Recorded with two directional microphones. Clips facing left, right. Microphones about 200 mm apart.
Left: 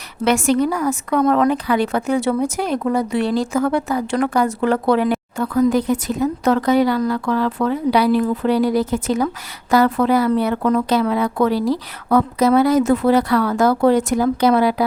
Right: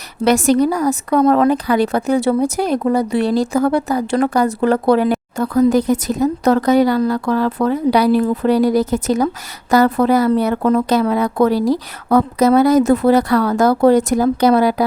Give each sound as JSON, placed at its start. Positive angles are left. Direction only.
{"t": 0.3, "sound": "speech", "side_deg": -40}